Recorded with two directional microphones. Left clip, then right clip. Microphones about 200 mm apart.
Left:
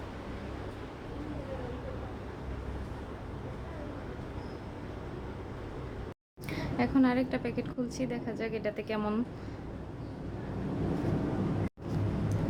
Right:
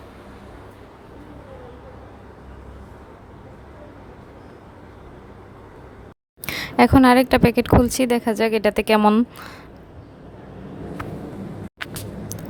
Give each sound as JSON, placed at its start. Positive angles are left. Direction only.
{"t": 6.4, "sound": "a woman's voice", "side_deg": -50}